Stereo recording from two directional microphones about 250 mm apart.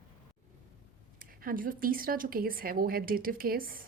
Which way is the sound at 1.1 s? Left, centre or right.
Right.